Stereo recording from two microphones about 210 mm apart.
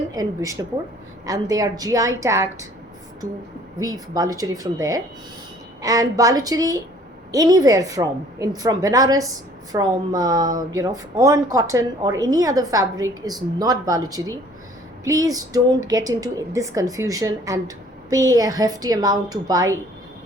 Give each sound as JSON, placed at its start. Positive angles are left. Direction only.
{"t": 0.1, "sound": "a woman's voice", "side_deg": -15}
{"t": 3.8, "sound": "a woman's voice", "side_deg": -15}